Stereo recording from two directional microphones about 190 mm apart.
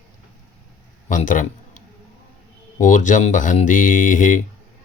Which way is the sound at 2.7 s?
40° left (ahead or behind).